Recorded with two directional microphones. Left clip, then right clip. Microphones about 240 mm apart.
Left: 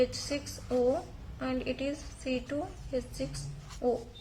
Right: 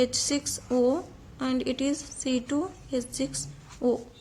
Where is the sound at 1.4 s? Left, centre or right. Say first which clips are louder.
Right 5 dB; right.